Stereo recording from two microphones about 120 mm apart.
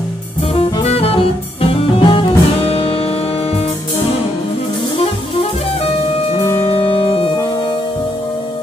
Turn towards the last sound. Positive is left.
turn(degrees=35)  # may be behind; listen again after turning